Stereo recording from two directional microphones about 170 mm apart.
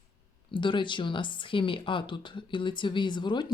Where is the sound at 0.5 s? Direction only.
30° left (ahead or behind).